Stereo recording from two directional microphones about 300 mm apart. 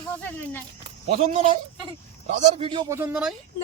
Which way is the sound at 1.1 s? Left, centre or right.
Right.